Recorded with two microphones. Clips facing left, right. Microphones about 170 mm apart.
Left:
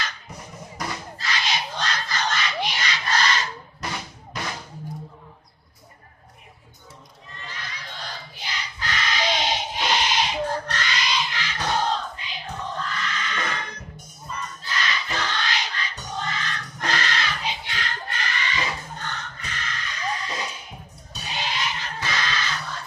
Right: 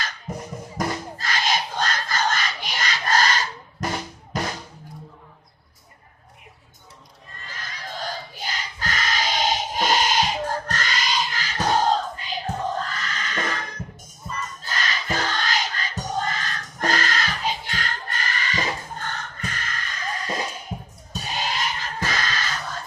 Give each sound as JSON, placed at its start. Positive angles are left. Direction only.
{"t": 0.3, "sound": "music", "side_deg": -45}
{"t": 0.8, "sound": "a sound", "side_deg": -50}
{"t": 7.3, "sound": "crowd", "side_deg": -45}
{"t": 14.6, "sound": "music", "side_deg": -45}